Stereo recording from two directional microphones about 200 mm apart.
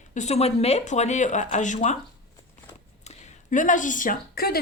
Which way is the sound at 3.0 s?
40° left (ahead or behind).